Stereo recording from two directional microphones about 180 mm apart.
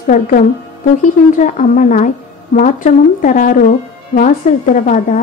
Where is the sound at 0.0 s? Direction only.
50° left (ahead or behind).